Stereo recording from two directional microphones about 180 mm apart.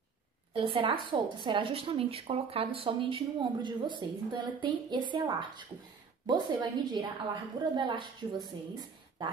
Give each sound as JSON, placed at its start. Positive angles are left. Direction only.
{"t": 0.5, "sound": "a woman's voice", "side_deg": -30}